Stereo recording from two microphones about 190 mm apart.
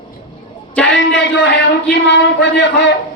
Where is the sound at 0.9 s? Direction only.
70° left (ahead or behind).